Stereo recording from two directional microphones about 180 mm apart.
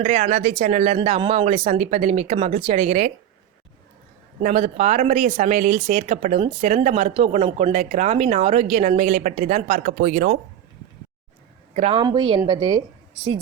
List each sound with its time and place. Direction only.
0.0 s speech: 40° right (ahead or behind)
4.4 s speech: 40° right (ahead or behind)
11.7 s speech: 35° right (ahead or behind)